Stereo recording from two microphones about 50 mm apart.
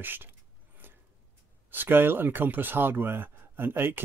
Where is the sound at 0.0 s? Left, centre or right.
Right.